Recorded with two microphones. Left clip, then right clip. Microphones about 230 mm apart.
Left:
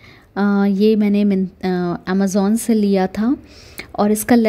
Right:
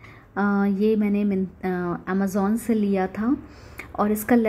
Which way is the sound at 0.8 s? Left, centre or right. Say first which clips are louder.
Left 7 dB; left.